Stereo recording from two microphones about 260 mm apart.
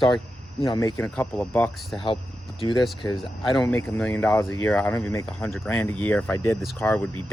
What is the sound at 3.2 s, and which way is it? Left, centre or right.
Speech, centre.